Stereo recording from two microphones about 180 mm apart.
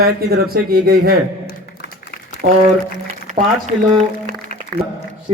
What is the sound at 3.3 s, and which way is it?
Speech, 40° right (ahead or behind).